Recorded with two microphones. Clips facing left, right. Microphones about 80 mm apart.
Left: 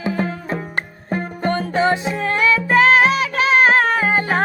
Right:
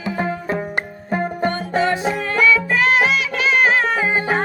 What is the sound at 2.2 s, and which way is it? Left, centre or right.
Music, left.